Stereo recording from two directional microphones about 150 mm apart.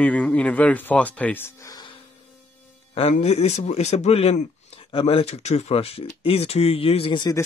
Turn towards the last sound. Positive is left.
turn(degrees=40)  # may be behind; listen again after turning